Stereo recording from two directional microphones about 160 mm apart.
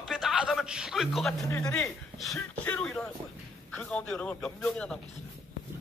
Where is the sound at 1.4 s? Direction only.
20° left (ahead or behind).